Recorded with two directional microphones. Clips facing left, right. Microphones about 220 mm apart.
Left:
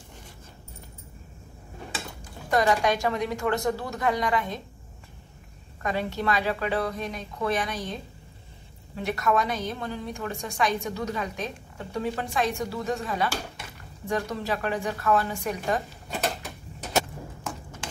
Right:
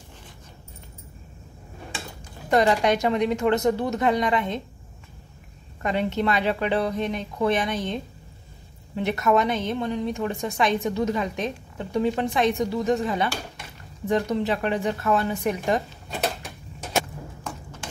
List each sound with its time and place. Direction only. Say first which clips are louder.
2.5 s a woman's voice: right 3 dB; 25° right (ahead or behind)
5.8 s a woman's voice: right 4 dB; 20° right (ahead or behind)